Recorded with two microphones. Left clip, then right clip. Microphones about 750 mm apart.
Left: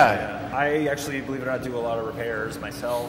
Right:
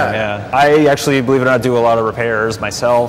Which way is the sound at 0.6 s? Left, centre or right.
Right.